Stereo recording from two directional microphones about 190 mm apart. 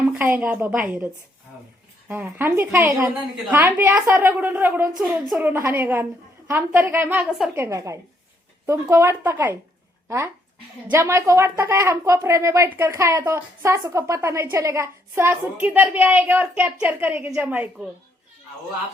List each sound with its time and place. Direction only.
0.0 s a woman's voice: 10° right (ahead or behind)
10.9 s a woman's voice: 15° right (ahead or behind)